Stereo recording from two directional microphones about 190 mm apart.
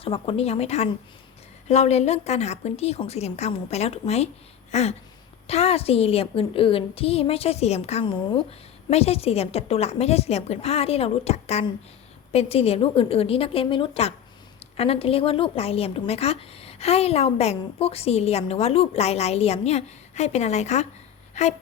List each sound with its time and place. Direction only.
0.0 s speech: 30° left (ahead or behind)